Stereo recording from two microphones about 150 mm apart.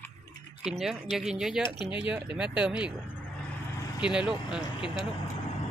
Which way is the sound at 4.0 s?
5° right (ahead or behind).